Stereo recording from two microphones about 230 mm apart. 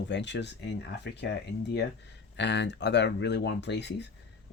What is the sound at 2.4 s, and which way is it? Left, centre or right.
Speech, left.